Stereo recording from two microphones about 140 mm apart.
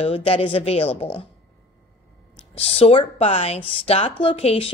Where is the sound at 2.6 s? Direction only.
45° left (ahead or behind).